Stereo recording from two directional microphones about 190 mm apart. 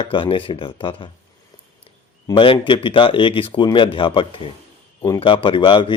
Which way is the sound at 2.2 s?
25° left (ahead or behind).